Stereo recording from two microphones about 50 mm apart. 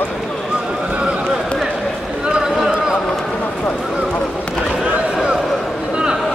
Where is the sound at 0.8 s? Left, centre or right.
Right.